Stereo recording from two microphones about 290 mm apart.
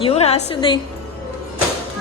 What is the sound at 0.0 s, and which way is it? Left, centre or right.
Speech, left.